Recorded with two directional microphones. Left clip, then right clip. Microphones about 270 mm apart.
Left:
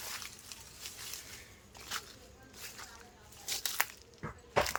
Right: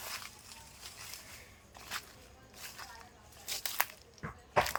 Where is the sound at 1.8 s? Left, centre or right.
Centre.